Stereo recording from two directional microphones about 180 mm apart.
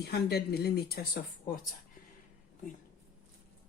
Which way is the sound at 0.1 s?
60° left (ahead or behind).